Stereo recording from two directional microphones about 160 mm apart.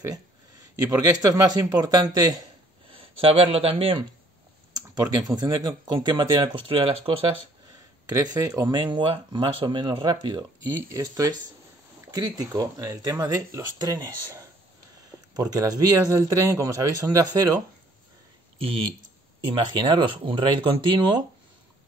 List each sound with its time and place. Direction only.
1.2 s speech: 20° right (ahead or behind)
2.9 s speech: 35° right (ahead or behind)
5.1 s speech: 25° right (ahead or behind)
8.1 s speech: 20° right (ahead or behind)
15.0 s a sound: 25° right (ahead or behind)
15.5 s speech: 25° right (ahead or behind)
18.6 s speech: 35° right (ahead or behind)